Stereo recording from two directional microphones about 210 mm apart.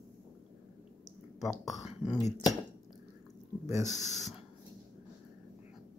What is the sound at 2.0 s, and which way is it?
Speech, 15° left (ahead or behind).